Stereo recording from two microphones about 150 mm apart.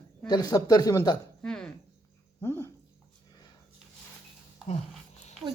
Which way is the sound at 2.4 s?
15° left (ahead or behind).